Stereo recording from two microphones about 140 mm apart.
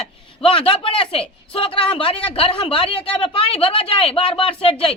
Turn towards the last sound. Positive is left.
turn(degrees=40)  # may be behind; listen again after turning